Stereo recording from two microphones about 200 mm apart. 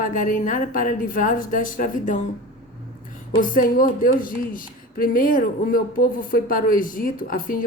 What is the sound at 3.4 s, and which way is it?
Speech, 45° left (ahead or behind).